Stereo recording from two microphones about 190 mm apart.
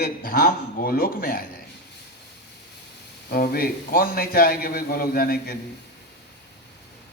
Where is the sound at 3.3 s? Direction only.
50° left (ahead or behind).